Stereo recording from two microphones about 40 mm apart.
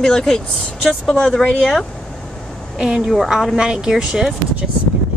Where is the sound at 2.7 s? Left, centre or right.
Centre.